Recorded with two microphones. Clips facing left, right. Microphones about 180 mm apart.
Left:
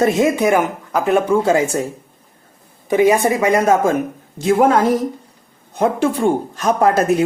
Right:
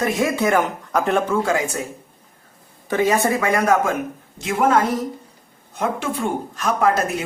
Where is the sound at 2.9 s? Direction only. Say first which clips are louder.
Left 5 dB; 15° left (ahead or behind).